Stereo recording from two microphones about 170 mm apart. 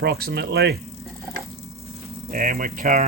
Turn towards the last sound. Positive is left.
turn(degrees=-50)  # may be behind; listen again after turning